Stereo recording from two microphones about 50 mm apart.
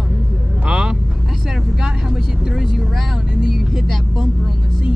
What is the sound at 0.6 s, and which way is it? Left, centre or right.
Vehicle, centre.